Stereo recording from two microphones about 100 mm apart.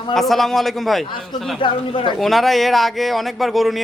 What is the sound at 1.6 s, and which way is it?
Speech, 55° left (ahead or behind).